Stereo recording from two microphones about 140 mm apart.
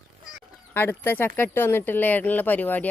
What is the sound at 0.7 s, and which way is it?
Speech, 15° left (ahead or behind).